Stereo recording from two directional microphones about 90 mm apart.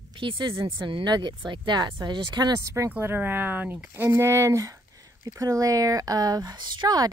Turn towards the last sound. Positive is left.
turn(degrees=-45)  # may be behind; listen again after turning